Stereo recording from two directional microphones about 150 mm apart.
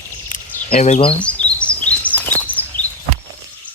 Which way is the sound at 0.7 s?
45° left (ahead or behind).